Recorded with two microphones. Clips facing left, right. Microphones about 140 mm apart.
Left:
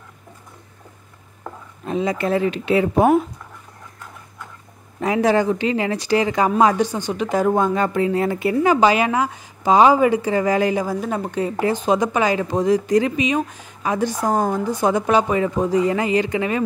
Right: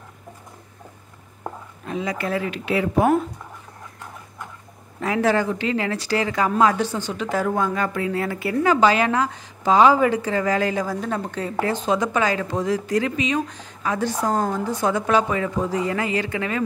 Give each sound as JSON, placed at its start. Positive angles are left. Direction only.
{"t": 1.9, "sound": "a woman's voice", "side_deg": 25}
{"t": 5.0, "sound": "a woman's voice", "side_deg": 20}